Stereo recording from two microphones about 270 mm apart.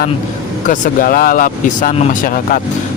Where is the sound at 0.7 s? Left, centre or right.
Left.